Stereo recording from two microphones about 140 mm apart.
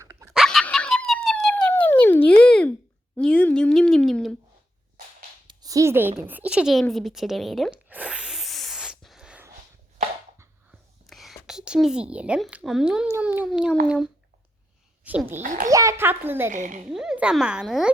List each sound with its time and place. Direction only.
0.3 s dog: centre (ahead or behind)
3.2 s a sound: 10° left (ahead or behind)
5.5 s a sound: 25° right (ahead or behind)
6.2 s a child's voice: 10° right (ahead or behind)
7.9 s a sound: 10° right (ahead or behind)
10.7 s whispering: centre (ahead or behind)
13.2 s a child's voice: 10° right (ahead or behind)
15.4 s a child's voice: 65° right (ahead or behind)
15.7 s a child's voice: 20° right (ahead or behind)
16.5 s speech: 60° right (ahead or behind)
16.9 s speech: 5° right (ahead or behind)